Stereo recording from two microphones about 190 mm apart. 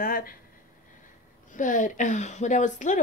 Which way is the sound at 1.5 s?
45° left (ahead or behind).